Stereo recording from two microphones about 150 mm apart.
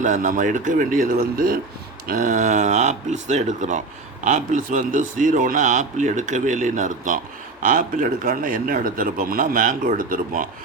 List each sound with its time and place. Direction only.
0.0 s a man's voice: 60° right (ahead or behind)